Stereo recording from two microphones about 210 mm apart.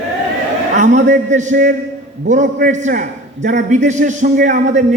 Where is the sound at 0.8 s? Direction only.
35° right (ahead or behind).